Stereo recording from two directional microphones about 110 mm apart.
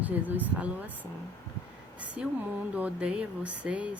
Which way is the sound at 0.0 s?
15° right (ahead or behind).